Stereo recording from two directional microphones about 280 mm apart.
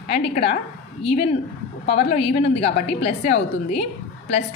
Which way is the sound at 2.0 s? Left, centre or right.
Left.